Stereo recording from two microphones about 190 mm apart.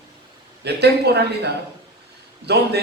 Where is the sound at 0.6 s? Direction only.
60° right (ahead or behind).